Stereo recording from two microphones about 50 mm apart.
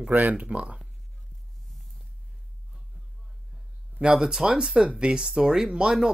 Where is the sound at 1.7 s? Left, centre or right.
Centre.